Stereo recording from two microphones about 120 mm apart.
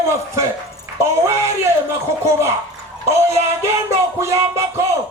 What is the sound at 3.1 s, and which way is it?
A man's voice, 25° right (ahead or behind).